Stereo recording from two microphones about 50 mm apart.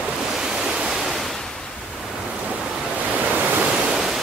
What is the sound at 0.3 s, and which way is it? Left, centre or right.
Waves, centre.